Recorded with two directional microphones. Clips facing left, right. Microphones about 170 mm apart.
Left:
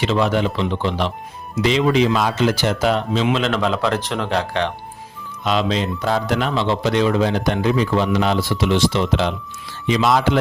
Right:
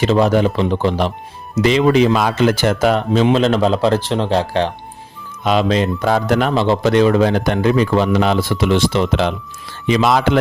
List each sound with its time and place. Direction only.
0.0 s speech: 40° right (ahead or behind)
3.2 s speech: 35° right (ahead or behind)
5.4 s speech: 50° right (ahead or behind)